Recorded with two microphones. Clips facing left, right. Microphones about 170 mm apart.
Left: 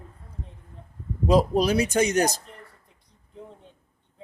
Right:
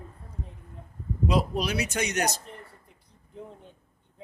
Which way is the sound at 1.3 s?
40° left (ahead or behind).